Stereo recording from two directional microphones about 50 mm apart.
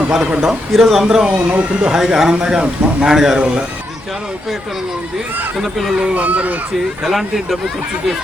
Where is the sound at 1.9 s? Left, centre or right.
Centre.